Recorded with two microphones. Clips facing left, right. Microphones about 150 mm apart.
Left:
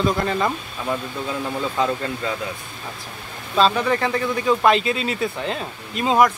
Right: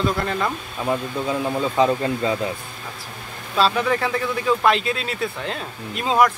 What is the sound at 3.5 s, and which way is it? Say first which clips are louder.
Speech: left 1 dB; 5° right (ahead or behind).